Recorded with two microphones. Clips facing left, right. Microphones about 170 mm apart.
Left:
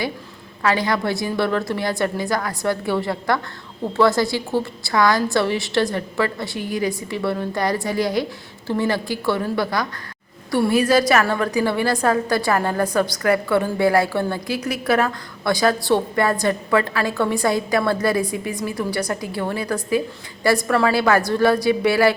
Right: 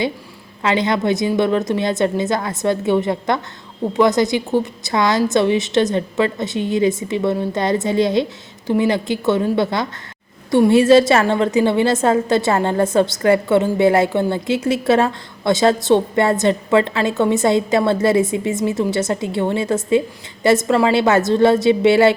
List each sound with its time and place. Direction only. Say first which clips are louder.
0.6 s a woman's voice: right 3 dB; 20° right (ahead or behind)